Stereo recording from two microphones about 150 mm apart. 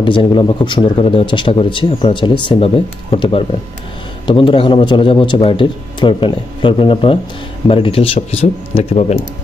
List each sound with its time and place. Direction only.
0.0 s speech: 35° left (ahead or behind)